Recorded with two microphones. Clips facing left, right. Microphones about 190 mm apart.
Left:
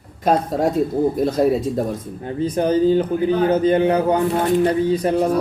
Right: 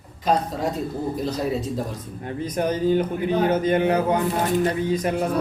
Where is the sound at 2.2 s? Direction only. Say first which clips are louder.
Left 5 dB; 30° left (ahead or behind).